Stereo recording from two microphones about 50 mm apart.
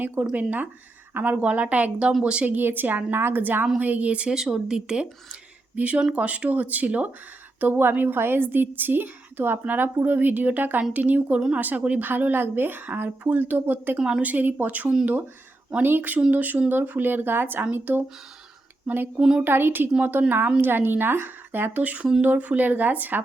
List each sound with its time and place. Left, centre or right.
0.0 s a woman's voice: right
2.6 s speech: right
3.4 s a woman's voice: right
4.4 s speech: centre
5.7 s a woman's voice: right
11.3 s speech: centre
11.6 s a woman's voice: right
19.5 s a woman's voice: right